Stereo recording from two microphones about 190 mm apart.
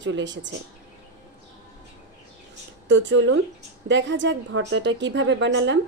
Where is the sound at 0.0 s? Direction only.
70° right (ahead or behind).